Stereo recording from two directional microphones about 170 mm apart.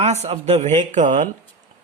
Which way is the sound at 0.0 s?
40° right (ahead or behind).